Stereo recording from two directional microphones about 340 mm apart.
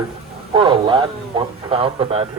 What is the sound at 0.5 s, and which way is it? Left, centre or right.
Speech, centre.